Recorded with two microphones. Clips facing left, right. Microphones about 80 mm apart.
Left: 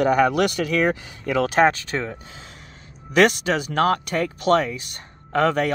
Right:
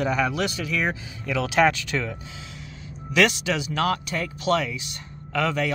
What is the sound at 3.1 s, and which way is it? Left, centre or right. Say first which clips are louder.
Speech: left 4 dB; left.